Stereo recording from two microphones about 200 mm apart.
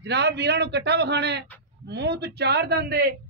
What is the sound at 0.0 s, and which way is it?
A man's voice, 55° right (ahead or behind).